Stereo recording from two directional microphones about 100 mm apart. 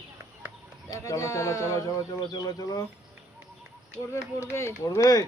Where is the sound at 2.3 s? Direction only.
40° left (ahead or behind).